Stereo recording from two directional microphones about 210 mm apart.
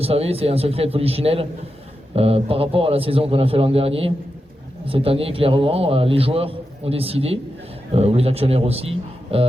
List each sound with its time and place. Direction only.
0.0 s a man's voice: 30° right (ahead or behind)